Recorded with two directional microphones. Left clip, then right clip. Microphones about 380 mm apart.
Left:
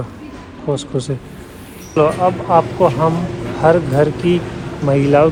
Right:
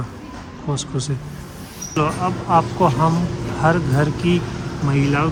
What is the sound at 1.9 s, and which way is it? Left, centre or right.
Speech, centre.